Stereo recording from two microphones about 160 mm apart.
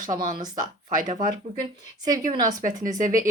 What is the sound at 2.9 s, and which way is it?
Speech, 55° right (ahead or behind).